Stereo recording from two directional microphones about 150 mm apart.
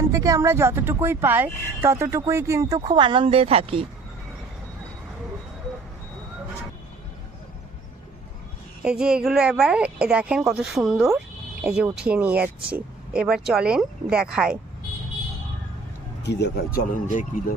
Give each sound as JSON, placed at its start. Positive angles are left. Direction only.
{"t": 0.1, "sound": "speech", "side_deg": -20}
{"t": 8.8, "sound": "a woman's voice", "side_deg": -5}
{"t": 16.7, "sound": "speech", "side_deg": 65}